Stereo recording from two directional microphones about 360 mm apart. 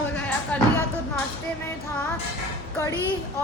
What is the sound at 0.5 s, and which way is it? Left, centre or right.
Speech, centre.